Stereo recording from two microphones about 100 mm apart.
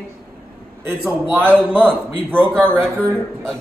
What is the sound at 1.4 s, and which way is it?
A man's voice, 20° right (ahead or behind).